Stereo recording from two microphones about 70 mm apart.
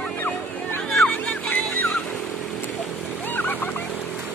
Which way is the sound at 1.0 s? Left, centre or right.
Left.